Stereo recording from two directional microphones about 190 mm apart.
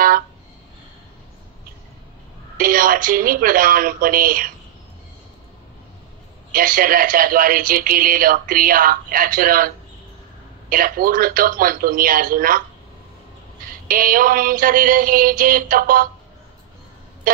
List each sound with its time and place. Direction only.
2.5 s speech: 50° right (ahead or behind)
6.5 s speech: 45° right (ahead or behind)
10.7 s speech: 50° right (ahead or behind)
13.8 s speech: 50° right (ahead or behind)